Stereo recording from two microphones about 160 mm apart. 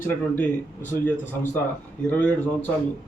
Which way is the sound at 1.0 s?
10° left (ahead or behind).